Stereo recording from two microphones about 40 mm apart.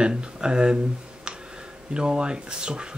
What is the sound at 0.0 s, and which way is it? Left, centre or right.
Speech, right.